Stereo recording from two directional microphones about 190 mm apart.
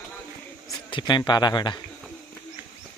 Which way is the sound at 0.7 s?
25° left (ahead or behind).